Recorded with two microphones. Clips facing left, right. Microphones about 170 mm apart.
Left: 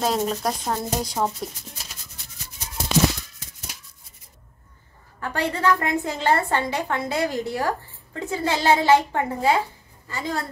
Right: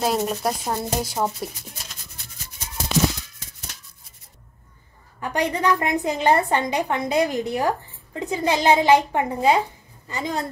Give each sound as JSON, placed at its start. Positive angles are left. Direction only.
{"t": 0.0, "sound": "speech", "side_deg": -5}
{"t": 5.2, "sound": "a woman's voice", "side_deg": -15}